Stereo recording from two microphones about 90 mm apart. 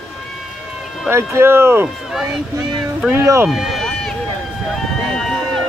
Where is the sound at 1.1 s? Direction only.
30° right (ahead or behind).